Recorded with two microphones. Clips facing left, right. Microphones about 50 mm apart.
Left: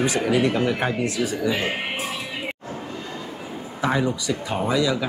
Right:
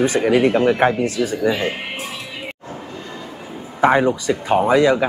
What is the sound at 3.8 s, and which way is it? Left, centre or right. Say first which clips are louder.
Speech: right 8 dB; right.